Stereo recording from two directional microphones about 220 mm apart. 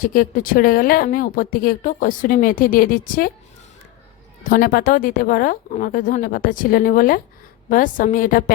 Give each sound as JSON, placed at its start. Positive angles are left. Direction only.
{"t": 0.0, "sound": "speech", "side_deg": 40}
{"t": 4.4, "sound": "speech", "side_deg": 40}